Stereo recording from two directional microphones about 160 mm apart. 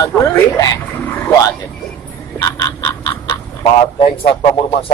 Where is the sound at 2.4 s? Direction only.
20° left (ahead or behind).